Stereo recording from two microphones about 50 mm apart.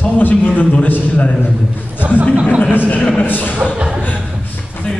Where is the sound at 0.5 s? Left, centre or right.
Left.